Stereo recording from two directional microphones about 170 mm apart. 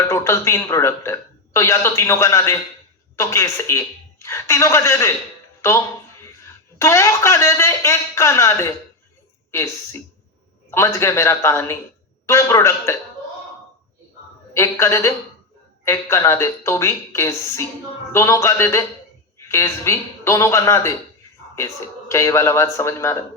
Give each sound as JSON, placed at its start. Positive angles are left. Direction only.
{"t": 0.0, "sound": "a man's voice", "side_deg": 15}
{"t": 6.4, "sound": "a man's voice", "side_deg": 15}
{"t": 10.7, "sound": "a man's voice", "side_deg": 15}
{"t": 14.5, "sound": "a man's voice", "side_deg": 15}
{"t": 22.1, "sound": "a man's voice", "side_deg": 15}